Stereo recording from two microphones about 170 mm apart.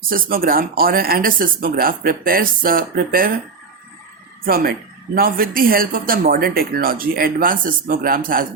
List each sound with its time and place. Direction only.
0.1 s speech: 60° right (ahead or behind)
4.4 s speech: 60° right (ahead or behind)